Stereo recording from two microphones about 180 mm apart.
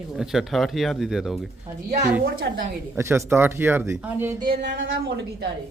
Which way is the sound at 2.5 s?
75° right (ahead or behind).